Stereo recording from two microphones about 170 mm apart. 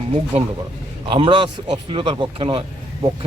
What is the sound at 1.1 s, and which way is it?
A man's voice, 30° right (ahead or behind).